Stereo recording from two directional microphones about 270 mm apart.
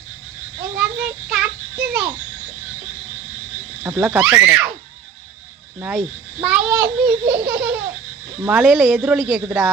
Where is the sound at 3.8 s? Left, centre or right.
Centre.